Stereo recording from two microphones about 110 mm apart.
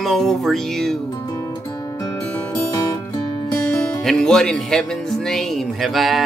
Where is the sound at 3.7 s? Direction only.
5° left (ahead or behind).